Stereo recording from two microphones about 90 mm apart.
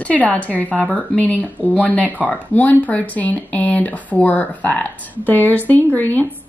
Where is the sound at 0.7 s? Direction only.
15° right (ahead or behind).